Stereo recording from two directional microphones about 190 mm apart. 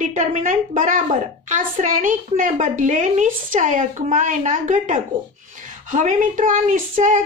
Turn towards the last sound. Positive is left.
turn(degrees=-40)  # may be behind; listen again after turning